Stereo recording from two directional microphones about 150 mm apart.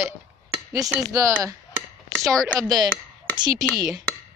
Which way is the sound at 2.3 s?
5° left (ahead or behind).